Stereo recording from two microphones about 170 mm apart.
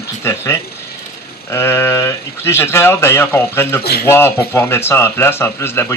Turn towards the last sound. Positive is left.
turn(degrees=15)  # may be behind; listen again after turning